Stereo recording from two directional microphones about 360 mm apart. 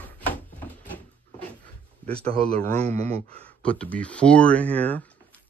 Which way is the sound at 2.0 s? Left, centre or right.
Centre.